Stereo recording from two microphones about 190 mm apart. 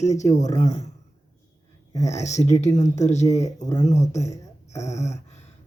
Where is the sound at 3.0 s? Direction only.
35° left (ahead or behind).